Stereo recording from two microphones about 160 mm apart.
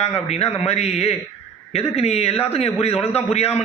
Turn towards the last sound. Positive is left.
turn(degrees=40)  # may be behind; listen again after turning